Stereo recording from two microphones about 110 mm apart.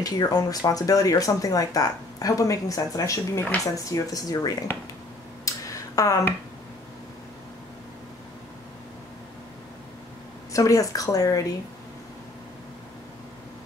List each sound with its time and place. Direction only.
0.0 s speech: 35° left (ahead or behind)
5.4 s a sound: 30° left (ahead or behind)
10.5 s speech: 30° left (ahead or behind)